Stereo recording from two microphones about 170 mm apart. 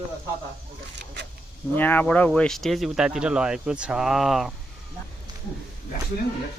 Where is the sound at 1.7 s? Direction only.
10° left (ahead or behind).